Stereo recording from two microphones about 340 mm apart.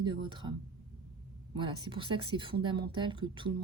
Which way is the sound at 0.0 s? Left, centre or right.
Centre.